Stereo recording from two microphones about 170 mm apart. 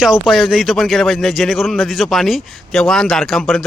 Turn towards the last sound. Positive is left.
turn(degrees=0)  # may be behind; listen again after turning